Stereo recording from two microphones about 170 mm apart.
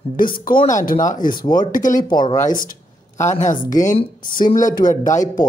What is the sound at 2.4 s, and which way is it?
Speech, 55° left (ahead or behind).